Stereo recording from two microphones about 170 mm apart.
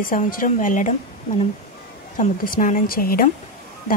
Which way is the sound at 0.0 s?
55° left (ahead or behind).